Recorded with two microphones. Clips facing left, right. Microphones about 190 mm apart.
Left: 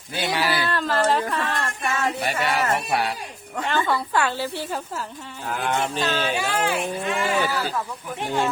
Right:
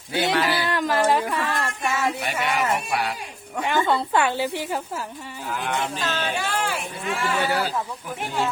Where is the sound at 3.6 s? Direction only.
15° right (ahead or behind).